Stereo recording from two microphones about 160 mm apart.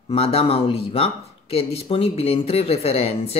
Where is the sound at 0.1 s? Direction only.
40° left (ahead or behind).